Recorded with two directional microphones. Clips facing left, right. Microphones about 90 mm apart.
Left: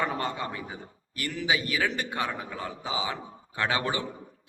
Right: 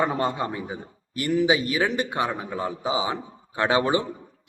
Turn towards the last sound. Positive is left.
turn(degrees=-20)  # may be behind; listen again after turning